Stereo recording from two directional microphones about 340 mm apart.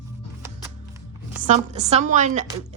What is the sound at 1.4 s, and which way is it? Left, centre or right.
A woman's voice, centre.